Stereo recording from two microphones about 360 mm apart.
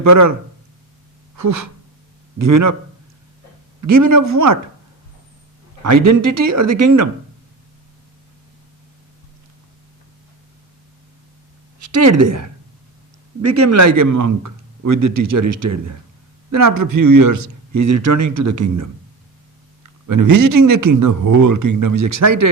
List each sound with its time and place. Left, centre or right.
0.0 s speech: right
1.4 s a sound: right
2.4 s speech: right
3.8 s speech: right
5.8 s speech: right
11.9 s speech: right
13.4 s speech: right
20.1 s speech: right